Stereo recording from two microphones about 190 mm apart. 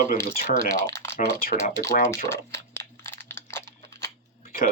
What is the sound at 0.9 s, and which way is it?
Typing, 15° left (ahead or behind).